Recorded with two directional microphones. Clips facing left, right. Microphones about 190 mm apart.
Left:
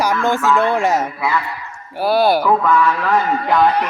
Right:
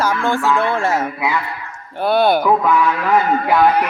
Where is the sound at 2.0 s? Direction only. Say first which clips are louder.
Even; 5° left (ahead or behind).